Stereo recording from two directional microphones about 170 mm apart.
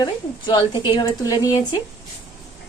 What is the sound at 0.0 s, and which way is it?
A woman's voice, 25° left (ahead or behind).